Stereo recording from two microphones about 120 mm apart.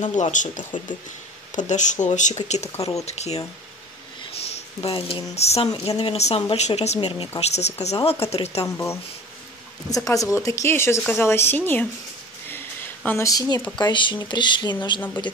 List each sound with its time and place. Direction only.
0.0 s speech: 90° left; by 2.7 s 65° left (ahead or behind)
2.7 s speech: 30° left (ahead or behind)
3.1 s speech: 65° left (ahead or behind)
4.2 s a sound: 55° left (ahead or behind)
5.3 s speech: 60° left (ahead or behind)
7.0 s speech: 50° left (ahead or behind)
8.6 s speech: 20° left (ahead or behind)
12.4 s a sound: 15° left (ahead or behind)
13.3 s speech: 30° left (ahead or behind)